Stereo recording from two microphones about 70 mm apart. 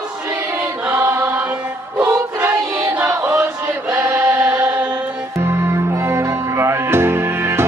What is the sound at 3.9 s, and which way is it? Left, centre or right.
Chant, right.